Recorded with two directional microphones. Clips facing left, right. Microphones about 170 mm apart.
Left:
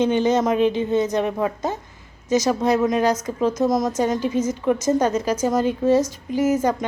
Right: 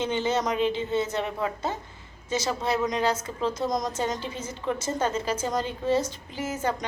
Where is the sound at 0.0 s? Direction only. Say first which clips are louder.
Left 8 dB; 15° left (ahead or behind).